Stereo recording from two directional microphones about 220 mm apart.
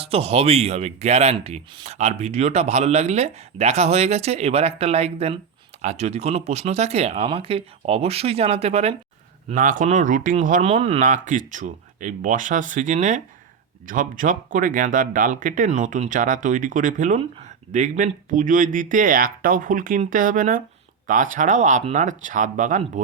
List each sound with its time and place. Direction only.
0.0 s speech: 25° right (ahead or behind)